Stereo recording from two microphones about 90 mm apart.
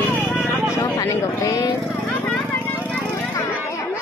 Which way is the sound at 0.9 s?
35° left (ahead or behind).